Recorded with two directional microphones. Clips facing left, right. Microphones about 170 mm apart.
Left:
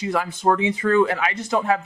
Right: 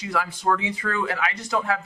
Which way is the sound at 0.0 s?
25° left (ahead or behind).